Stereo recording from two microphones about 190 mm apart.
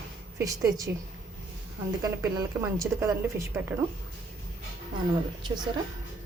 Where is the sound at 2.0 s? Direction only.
15° right (ahead or behind).